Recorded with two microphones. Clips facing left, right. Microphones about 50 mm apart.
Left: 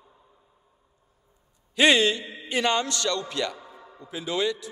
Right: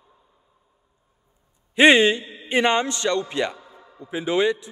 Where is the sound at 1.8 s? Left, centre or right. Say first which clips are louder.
Right 5 dB; right.